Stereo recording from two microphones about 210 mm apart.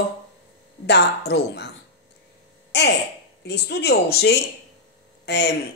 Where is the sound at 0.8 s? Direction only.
50° left (ahead or behind).